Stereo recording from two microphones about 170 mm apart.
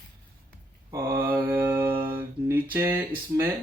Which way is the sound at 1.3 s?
10° right (ahead or behind).